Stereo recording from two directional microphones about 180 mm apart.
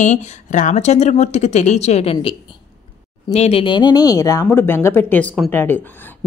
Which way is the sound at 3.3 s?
35° left (ahead or behind).